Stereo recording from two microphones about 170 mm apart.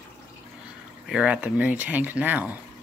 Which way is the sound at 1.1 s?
5° right (ahead or behind).